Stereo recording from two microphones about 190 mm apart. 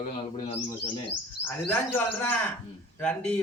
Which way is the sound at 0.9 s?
10° left (ahead or behind).